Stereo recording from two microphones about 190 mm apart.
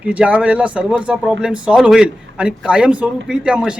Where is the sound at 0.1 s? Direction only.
5° right (ahead or behind).